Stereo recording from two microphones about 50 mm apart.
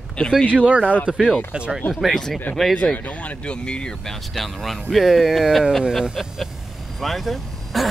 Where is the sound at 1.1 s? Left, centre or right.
Centre.